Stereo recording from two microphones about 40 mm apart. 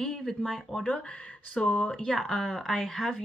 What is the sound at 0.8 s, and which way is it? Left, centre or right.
Speech, left.